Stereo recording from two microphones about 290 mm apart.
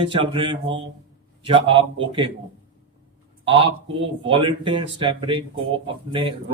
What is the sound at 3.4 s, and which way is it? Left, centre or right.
A man's voice, centre.